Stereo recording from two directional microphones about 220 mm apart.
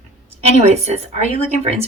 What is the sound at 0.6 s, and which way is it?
Speech, 30° right (ahead or behind).